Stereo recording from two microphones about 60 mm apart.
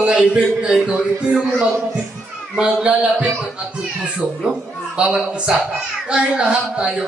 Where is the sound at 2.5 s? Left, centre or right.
Centre.